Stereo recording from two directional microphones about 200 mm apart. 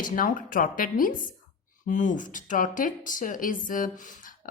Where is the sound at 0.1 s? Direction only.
45° left (ahead or behind).